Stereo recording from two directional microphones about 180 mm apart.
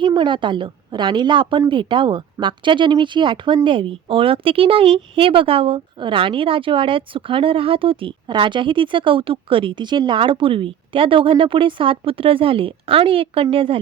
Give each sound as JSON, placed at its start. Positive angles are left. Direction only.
{"t": 0.0, "sound": "a woman's voice", "side_deg": -25}